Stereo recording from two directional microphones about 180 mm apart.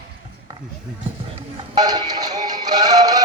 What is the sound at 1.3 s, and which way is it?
Synthetic singing, 25° right (ahead or behind).